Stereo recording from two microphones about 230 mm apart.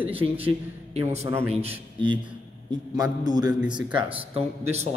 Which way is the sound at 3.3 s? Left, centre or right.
Centre.